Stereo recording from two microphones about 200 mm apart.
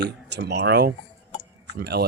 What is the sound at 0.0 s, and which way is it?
Speech, 55° right (ahead or behind).